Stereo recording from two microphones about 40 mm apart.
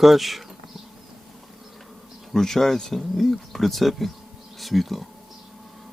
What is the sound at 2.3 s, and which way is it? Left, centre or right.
Speech, centre.